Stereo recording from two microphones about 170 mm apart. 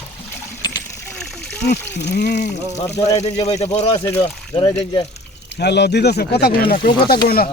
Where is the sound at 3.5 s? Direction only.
40° left (ahead or behind).